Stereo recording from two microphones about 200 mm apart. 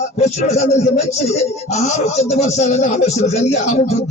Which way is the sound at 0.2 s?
35° left (ahead or behind).